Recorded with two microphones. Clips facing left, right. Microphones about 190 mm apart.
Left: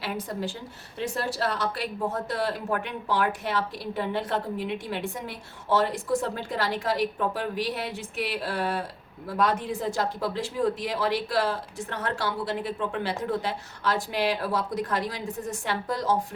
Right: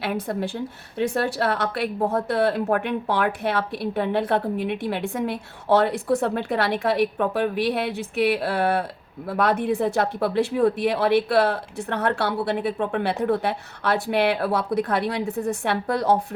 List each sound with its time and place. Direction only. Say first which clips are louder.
0.0 s a woman's voice: right 5 dB; 60° right (ahead or behind)